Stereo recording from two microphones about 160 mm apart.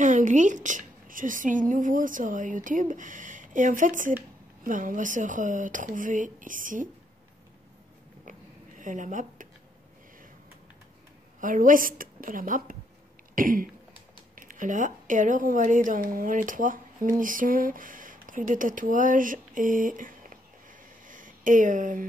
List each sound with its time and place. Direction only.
0.0 s a woman's voice: 50° right (ahead or behind)
8.3 s a sound: 55° right (ahead or behind)
11.4 s a woman's voice: 55° right (ahead or behind)
13.3 s throat clearing: 60° right (ahead or behind)
14.3 s speech: 55° right (ahead or behind)
21.1 s a sound: 55° right (ahead or behind)